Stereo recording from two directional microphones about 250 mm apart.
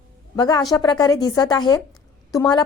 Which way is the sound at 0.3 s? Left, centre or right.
Centre.